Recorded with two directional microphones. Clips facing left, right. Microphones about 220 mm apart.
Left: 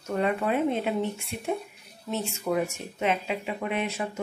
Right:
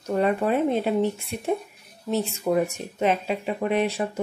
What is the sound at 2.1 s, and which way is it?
Speech, 35° right (ahead or behind).